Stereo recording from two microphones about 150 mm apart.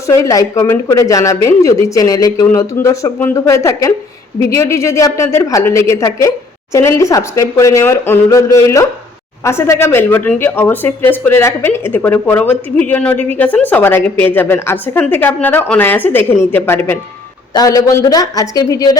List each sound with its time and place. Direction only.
0.1 s speech: 20° left (ahead or behind)